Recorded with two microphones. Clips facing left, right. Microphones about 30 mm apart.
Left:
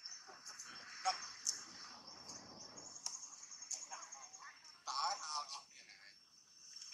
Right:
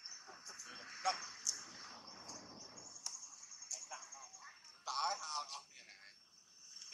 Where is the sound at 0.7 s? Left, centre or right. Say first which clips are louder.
Right 1 dB; right.